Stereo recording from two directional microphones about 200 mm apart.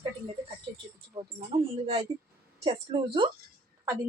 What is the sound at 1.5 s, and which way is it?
A woman's voice, 30° right (ahead or behind).